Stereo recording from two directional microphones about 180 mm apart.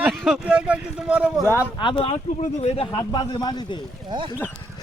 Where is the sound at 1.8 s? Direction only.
30° left (ahead or behind).